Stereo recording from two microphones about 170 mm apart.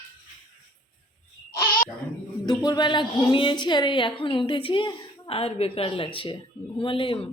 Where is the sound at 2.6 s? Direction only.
25° left (ahead or behind).